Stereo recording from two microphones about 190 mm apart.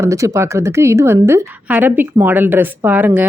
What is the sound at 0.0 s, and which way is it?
Speech, 15° right (ahead or behind).